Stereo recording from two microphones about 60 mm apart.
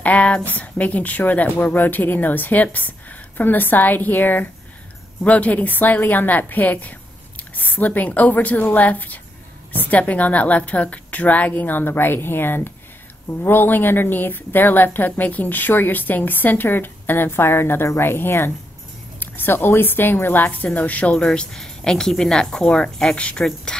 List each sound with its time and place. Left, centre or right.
0.0 s a woman's voice: left
21.1 s speech: centre